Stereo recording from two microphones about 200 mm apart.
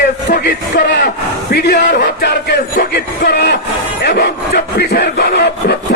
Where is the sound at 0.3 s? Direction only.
60° left (ahead or behind).